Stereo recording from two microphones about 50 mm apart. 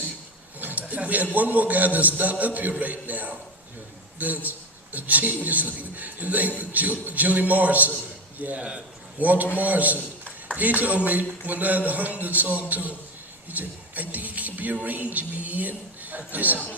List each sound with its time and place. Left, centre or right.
0.6 s a man's voice: right
8.5 s a man's voice: right